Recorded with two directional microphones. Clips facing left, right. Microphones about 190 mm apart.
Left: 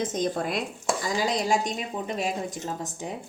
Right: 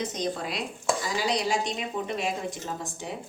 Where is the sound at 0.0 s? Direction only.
50° left (ahead or behind).